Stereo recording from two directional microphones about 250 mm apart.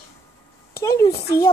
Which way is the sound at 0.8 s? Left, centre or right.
Centre.